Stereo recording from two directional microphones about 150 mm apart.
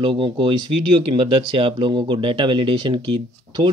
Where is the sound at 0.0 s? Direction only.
35° right (ahead or behind).